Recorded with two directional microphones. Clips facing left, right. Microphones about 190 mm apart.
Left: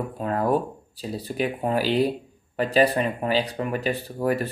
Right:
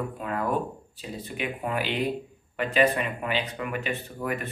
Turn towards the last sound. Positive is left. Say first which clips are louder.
# left 7 dB
turn(degrees=35)  # may be behind; listen again after turning